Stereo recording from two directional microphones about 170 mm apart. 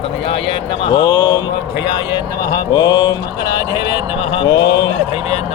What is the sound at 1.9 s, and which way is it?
Speech, 25° left (ahead or behind).